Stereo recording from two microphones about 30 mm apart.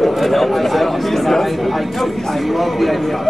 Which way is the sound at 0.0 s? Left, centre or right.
Centre.